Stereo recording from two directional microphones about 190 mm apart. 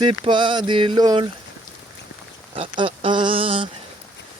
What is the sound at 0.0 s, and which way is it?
Speech, 25° right (ahead or behind).